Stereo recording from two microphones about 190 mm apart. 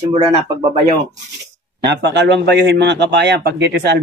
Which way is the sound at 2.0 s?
65° right (ahead or behind).